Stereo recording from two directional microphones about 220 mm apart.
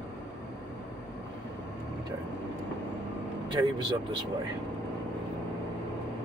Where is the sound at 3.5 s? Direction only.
20° right (ahead or behind).